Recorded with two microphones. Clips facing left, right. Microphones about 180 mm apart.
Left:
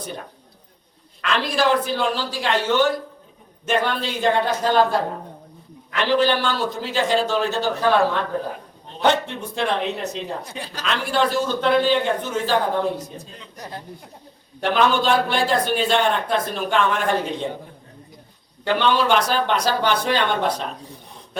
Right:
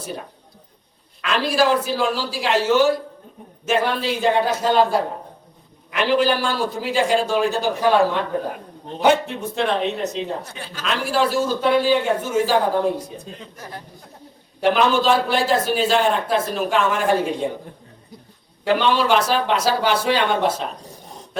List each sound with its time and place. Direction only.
1.2 s a man's voice: 5° right (ahead or behind)
10.5 s speech: 40° left (ahead or behind)
10.8 s a man's voice: 5° right (ahead or behind)
13.6 s speech: 25° left (ahead or behind)
14.6 s a man's voice: 5° right (ahead or behind)
18.6 s a man's voice: 5° right (ahead or behind)